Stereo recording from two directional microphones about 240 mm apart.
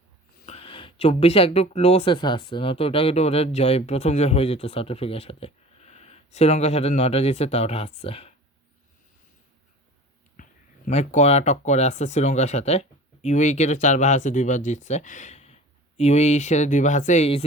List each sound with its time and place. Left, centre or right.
0.4 s speech: left
10.4 s a sound: left
10.8 s speech: left